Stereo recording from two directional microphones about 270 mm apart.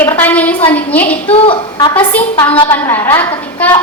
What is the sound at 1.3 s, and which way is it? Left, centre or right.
Speech, centre.